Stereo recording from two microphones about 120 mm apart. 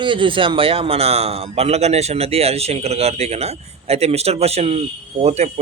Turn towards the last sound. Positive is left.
turn(degrees=-65)  # may be behind; listen again after turning